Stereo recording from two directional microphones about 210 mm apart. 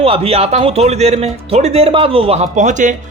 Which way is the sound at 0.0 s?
30° right (ahead or behind).